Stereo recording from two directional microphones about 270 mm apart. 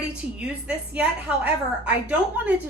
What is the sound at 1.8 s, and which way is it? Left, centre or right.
Speech, centre.